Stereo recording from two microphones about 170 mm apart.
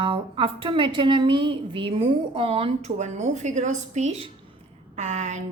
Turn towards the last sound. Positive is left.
turn(degrees=-45)  # may be behind; listen again after turning